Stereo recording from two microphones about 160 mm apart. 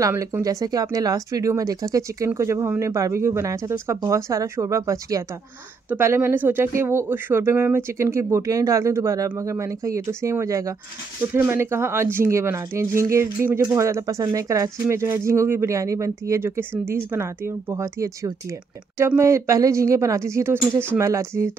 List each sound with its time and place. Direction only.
0.0 s speech: 20° right (ahead or behind)